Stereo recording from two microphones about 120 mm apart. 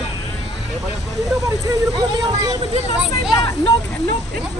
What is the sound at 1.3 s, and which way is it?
Speech, 30° right (ahead or behind).